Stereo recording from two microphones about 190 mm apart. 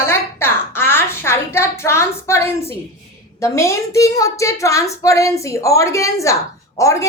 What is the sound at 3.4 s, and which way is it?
A woman's voice, 15° left (ahead or behind).